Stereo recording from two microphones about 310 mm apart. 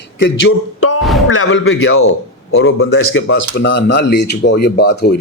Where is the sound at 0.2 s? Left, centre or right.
Left.